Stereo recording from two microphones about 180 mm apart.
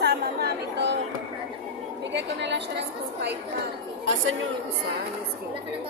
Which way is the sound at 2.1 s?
75° right (ahead or behind).